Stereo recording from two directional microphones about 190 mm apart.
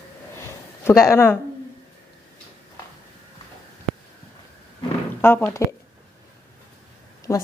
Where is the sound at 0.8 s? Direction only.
15° left (ahead or behind).